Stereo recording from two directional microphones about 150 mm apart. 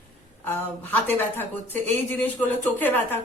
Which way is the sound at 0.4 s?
15° left (ahead or behind).